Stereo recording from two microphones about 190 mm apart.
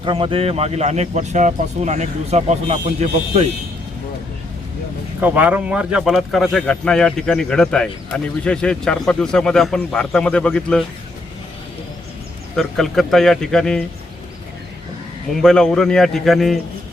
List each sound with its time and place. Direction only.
0.0 s speech: 30° right (ahead or behind)
5.2 s speech: 10° right (ahead or behind)
12.5 s speech: centre (ahead or behind)
15.4 s speech: 5° left (ahead or behind)